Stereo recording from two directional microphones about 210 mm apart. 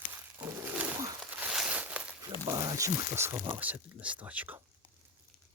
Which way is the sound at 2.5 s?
15° right (ahead or behind).